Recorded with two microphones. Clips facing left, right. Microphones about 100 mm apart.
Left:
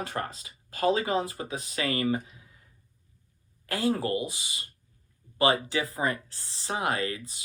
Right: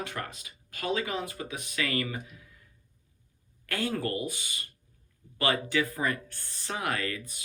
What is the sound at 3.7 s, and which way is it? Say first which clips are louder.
Speech: left 4 dB; 30° left (ahead or behind).